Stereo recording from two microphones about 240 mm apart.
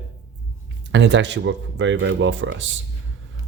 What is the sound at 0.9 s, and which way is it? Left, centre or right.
Speech, right.